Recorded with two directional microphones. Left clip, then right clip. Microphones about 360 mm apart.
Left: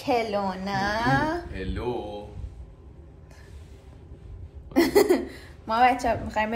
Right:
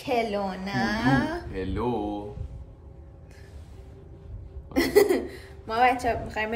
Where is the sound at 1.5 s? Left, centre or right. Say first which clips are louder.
Right 2 dB; centre.